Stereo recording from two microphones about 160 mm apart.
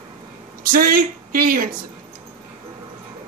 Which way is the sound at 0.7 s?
65° right (ahead or behind).